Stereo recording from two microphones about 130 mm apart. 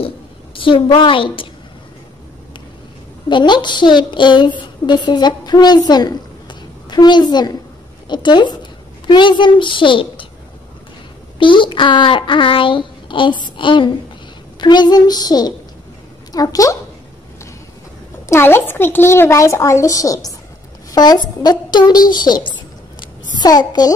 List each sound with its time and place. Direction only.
0.6 s a woman's voice: 40° left (ahead or behind)
3.3 s a woman's voice: 35° left (ahead or behind)
11.3 s a woman's voice: 40° left (ahead or behind)
18.3 s a child's voice: 20° left (ahead or behind)